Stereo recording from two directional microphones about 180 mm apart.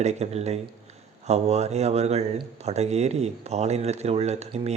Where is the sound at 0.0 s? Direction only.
35° right (ahead or behind).